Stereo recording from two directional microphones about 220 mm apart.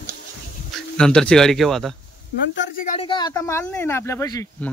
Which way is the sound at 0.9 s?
5° left (ahead or behind).